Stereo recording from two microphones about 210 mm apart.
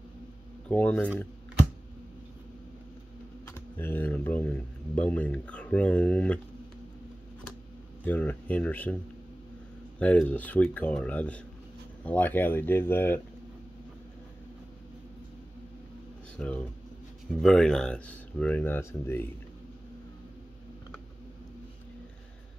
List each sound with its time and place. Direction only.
0.7 s speech: 5° left (ahead or behind)
3.4 s speech: 10° left (ahead or behind)
8.0 s speech: 10° left (ahead or behind)
9.9 s speech: 5° left (ahead or behind)
16.3 s speech: 5° left (ahead or behind)